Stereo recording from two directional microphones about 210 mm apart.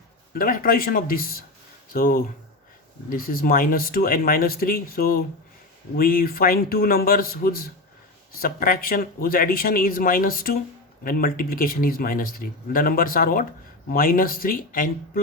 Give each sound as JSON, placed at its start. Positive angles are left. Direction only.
{"t": 0.3, "sound": "speech", "side_deg": 40}